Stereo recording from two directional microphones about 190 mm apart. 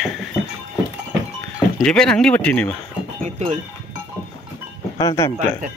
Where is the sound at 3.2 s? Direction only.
35° right (ahead or behind).